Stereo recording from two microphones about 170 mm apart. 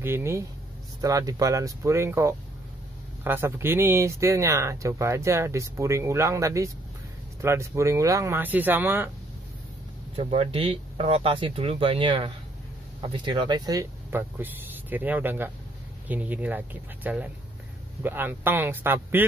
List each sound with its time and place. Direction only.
0.0 s speech: 15° right (ahead or behind)
10.1 s speech: 30° right (ahead or behind); by 19.2 s 10° right (ahead or behind)